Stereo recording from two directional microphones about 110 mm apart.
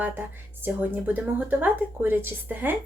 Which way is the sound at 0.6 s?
15° right (ahead or behind).